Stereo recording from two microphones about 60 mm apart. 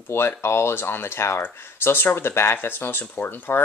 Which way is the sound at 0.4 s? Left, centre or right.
Left.